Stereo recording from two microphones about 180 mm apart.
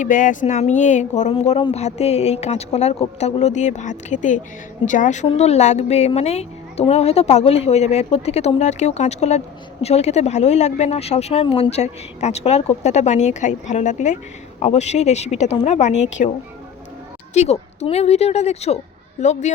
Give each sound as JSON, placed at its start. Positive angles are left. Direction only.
{"t": 0.0, "sound": "a woman's voice", "side_deg": 45}
{"t": 17.3, "sound": "speech", "side_deg": 40}